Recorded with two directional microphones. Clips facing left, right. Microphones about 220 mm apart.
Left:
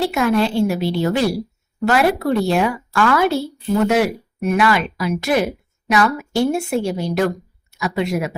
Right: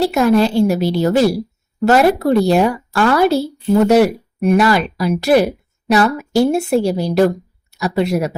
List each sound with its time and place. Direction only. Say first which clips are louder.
0.0 s speech: right 4 dB; 40° right (ahead or behind)